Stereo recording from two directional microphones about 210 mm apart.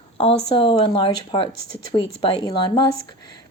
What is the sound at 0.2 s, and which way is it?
A woman's voice, 25° left (ahead or behind).